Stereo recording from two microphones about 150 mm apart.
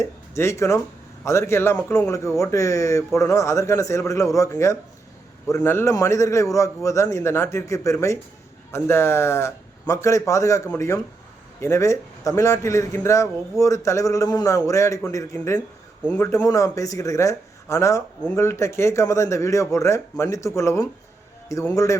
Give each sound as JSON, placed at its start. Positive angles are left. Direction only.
{"t": 0.0, "sound": "speech", "side_deg": 20}